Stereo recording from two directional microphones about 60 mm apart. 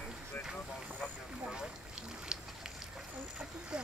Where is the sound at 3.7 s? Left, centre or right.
Centre.